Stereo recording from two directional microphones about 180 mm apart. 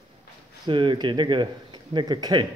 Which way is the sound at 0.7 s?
25° right (ahead or behind).